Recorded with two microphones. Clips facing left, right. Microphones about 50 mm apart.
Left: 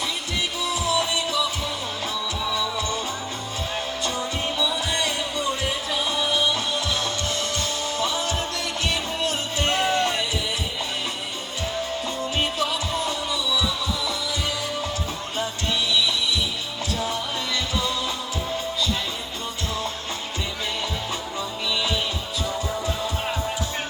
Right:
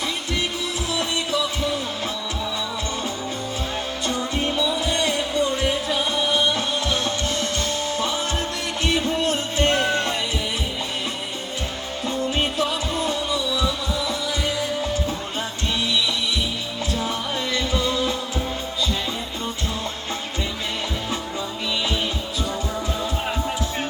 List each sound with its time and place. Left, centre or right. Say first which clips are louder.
4.0 s music: right 5 dB; right
5.0 s heart murmur: right 5 dB; right
5.9 s music: right 2 dB; right
12.5 s music: right 2 dB; right
17.1 s music: right 2 dB; right